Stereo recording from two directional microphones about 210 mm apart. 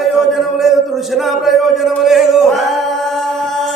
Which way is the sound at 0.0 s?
Centre (ahead or behind).